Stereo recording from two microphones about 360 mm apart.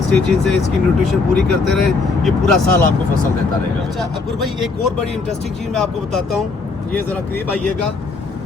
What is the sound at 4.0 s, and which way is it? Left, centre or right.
Speech, centre.